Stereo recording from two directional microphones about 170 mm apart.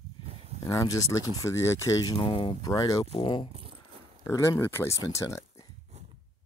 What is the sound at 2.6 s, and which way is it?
Speech, 20° left (ahead or behind).